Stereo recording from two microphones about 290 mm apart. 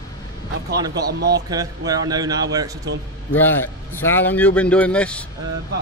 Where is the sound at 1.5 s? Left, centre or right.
Centre.